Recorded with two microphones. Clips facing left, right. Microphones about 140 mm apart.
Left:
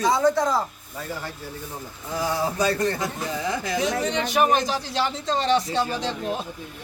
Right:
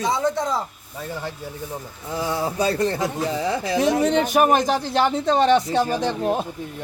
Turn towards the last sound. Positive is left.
turn(degrees=-45)  # may be behind; listen again after turning